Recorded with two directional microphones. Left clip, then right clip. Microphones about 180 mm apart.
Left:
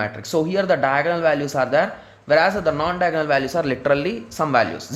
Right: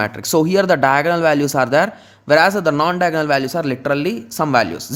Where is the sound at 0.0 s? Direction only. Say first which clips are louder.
Right 5 dB; 45° right (ahead or behind).